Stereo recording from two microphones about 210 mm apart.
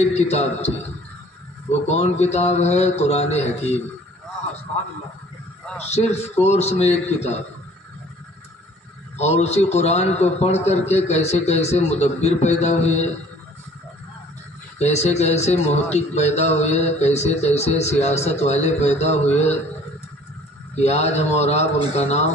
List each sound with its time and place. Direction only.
0.0 s a man's voice: 30° left (ahead or behind)
1.7 s a man's voice: 30° left (ahead or behind)
5.8 s a man's voice: 30° left (ahead or behind)
9.2 s a man's voice: 30° left (ahead or behind)
14.8 s a man's voice: 30° left (ahead or behind)
20.7 s a man's voice: 30° left (ahead or behind)